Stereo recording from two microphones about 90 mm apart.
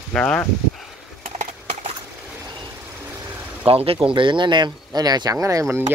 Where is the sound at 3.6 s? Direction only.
90° right.